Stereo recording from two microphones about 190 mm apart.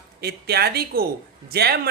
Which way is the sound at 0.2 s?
55° right (ahead or behind).